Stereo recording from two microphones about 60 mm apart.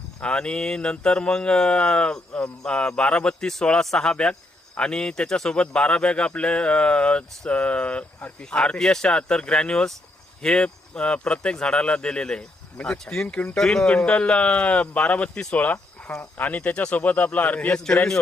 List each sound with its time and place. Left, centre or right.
0.2 s speech: centre
13.9 s speech: left
17.7 s speech: centre